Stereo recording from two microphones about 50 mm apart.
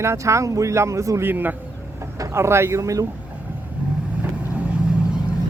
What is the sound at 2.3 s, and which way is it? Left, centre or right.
Speech, right.